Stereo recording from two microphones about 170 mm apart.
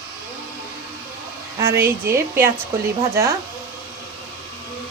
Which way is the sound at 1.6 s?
15° right (ahead or behind).